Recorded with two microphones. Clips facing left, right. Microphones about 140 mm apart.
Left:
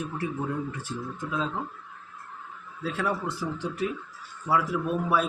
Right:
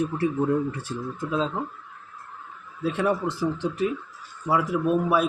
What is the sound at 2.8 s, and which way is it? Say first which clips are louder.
Speech: right 5 dB; 20° right (ahead or behind).